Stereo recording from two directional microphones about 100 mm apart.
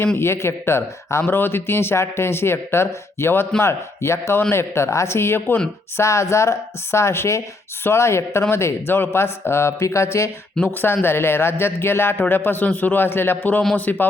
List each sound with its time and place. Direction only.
0.2 s speech: 25° left (ahead or behind)
10.5 s a man's voice: 15° left (ahead or behind)